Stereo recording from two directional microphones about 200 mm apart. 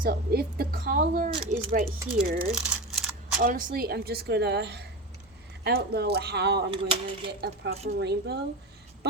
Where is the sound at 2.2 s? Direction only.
45° right (ahead or behind).